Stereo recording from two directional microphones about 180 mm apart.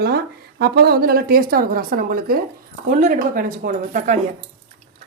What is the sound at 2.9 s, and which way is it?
Speech, 45° right (ahead or behind).